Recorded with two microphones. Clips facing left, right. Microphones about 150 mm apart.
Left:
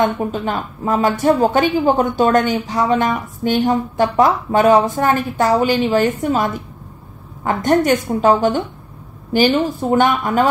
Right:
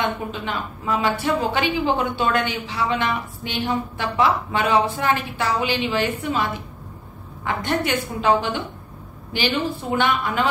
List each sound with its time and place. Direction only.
0.0 s a woman's voice: 45° left (ahead or behind)
7.4 s a woman's voice: 45° left (ahead or behind)